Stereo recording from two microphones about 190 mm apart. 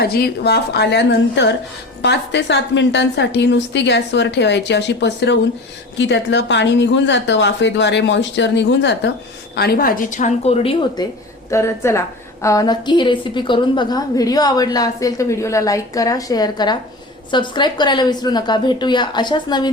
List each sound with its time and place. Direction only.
0.0 s a woman's voice: 55° left (ahead or behind)
9.6 s speech: 55° left (ahead or behind); by 11.0 s 30° left (ahead or behind)
11.5 s a woman's voice: 15° left (ahead or behind)